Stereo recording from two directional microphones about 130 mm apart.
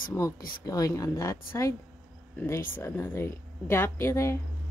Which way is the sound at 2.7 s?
20° left (ahead or behind).